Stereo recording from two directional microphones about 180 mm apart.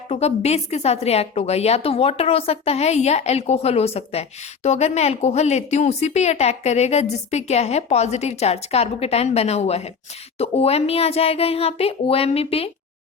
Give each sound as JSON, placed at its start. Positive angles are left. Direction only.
{"t": 0.1, "sound": "a woman's voice", "side_deg": 35}